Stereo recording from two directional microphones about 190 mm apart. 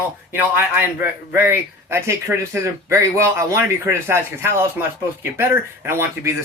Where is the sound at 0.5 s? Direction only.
10° right (ahead or behind).